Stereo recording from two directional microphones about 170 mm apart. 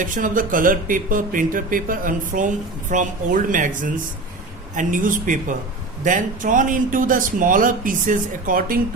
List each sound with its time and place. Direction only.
0.0 s speech: 50° right (ahead or behind)